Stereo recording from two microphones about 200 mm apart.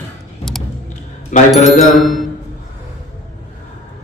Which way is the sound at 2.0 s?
Centre (ahead or behind).